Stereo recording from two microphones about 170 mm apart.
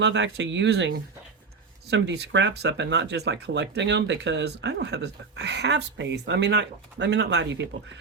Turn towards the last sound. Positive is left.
turn(degrees=-90)